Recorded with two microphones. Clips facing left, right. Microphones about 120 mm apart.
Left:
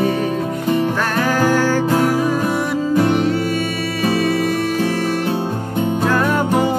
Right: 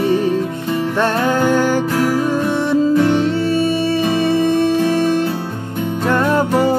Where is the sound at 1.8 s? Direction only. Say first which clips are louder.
Left 1 dB; 15° left (ahead or behind).